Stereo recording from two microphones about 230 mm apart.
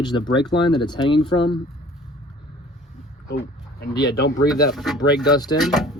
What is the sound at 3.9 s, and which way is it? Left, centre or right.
Speech, left.